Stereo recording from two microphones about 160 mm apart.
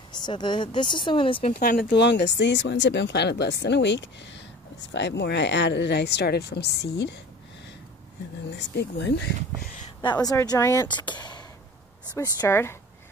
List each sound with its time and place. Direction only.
0.1 s speech: 30° left (ahead or behind)
1.6 s speech: 70° left (ahead or behind); by 7.2 s 90° left
8.5 s speech: 90° left
10.0 s speech: 25° left (ahead or behind)